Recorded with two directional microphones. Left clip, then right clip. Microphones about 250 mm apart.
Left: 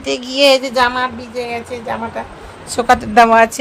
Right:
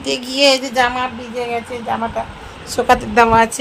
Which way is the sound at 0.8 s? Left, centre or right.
Centre.